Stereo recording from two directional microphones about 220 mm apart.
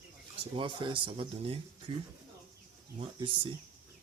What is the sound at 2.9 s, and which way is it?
Speech, 20° right (ahead or behind).